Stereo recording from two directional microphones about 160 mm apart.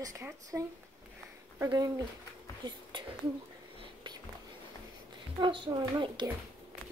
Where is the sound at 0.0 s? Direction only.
20° right (ahead or behind).